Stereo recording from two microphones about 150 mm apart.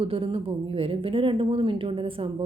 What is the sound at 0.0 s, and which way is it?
Speech, 40° right (ahead or behind).